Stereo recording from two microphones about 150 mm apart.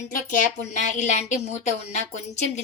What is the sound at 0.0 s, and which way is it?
A woman's voice, 60° left (ahead or behind).